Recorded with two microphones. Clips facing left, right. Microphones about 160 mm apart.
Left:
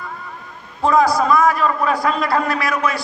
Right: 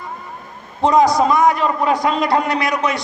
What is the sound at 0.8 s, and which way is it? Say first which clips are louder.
A man's voice: right 2 dB; 20° right (ahead or behind).